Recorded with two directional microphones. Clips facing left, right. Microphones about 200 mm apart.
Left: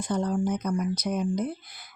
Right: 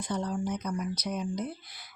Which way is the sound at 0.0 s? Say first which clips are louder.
Left 5 dB; 50° left (ahead or behind).